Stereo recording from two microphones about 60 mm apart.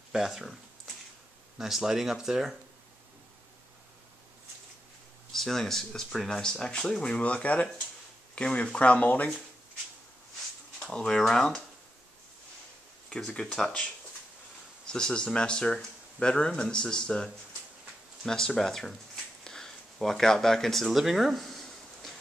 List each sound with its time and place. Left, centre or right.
0.1 s speech: centre
1.6 s speech: centre
5.3 s speech: centre; by 9.3 s left
10.9 s speech: centre
13.1 s speech: centre
14.9 s speech: centre
19.4 s a sound: centre